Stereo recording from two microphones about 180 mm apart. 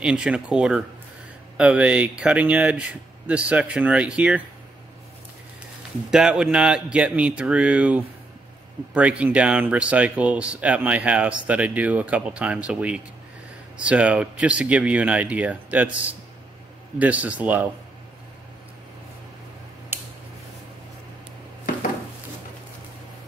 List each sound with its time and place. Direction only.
0.0 s speech: 5° right (ahead or behind)
6.0 s speech: centre (ahead or behind)
19.9 s scissors: 10° right (ahead or behind)